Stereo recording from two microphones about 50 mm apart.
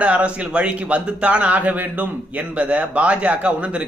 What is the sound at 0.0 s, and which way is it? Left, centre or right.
A man's voice, right.